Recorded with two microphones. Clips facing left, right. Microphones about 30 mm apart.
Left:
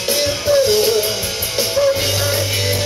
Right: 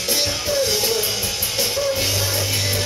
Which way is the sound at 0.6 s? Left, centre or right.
Left.